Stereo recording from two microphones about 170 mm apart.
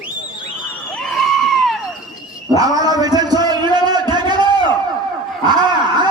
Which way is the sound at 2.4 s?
20° right (ahead or behind).